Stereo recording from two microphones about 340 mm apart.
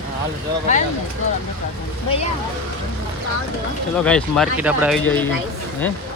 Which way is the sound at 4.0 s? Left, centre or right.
Centre.